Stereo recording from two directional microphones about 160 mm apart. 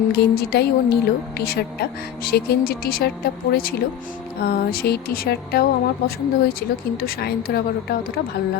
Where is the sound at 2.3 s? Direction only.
75° left (ahead or behind).